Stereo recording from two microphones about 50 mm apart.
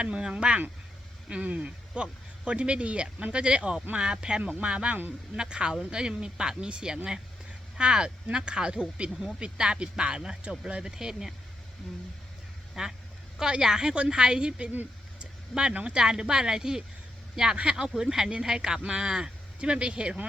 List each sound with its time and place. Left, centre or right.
0.0 s speech: centre
1.3 s speech: right; by 11.3 s centre
12.8 s speech: centre
15.2 s a sound: centre
15.7 s speech: right